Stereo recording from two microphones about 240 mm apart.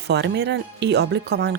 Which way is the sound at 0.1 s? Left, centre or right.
Right.